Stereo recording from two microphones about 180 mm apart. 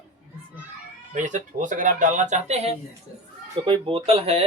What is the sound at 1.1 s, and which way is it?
Speech, 45° right (ahead or behind).